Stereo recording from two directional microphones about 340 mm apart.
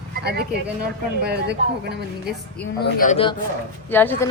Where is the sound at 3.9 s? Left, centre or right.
Centre.